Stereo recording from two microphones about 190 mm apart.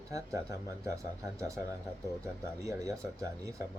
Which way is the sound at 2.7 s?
15° right (ahead or behind).